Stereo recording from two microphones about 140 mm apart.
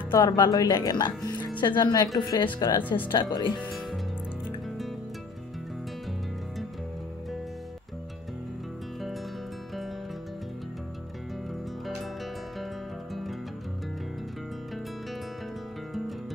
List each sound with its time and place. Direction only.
0.1 s speech: 30° left (ahead or behind)
13.1 s music: centre (ahead or behind)